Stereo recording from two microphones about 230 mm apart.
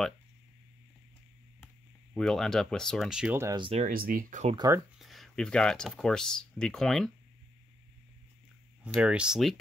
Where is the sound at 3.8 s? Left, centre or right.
Right.